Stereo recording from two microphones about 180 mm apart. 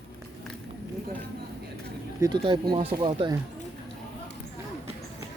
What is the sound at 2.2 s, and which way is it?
Speech, 25° right (ahead or behind).